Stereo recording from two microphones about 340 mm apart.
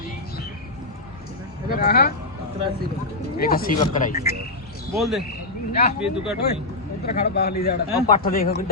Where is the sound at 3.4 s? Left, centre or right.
Left.